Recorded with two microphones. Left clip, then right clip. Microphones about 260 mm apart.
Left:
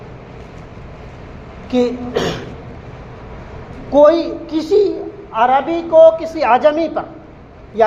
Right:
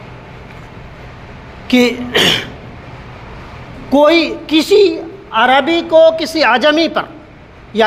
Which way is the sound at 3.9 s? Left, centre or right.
Right.